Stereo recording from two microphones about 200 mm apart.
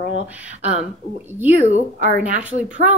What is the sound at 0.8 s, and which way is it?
A woman's voice, 10° right (ahead or behind).